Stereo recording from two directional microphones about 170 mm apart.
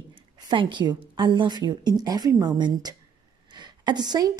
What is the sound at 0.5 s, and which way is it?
A woman's voice, 25° right (ahead or behind).